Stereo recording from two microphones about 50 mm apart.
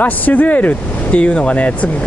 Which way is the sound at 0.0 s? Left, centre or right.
Left.